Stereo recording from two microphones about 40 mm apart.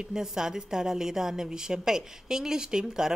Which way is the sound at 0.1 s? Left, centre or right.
Centre.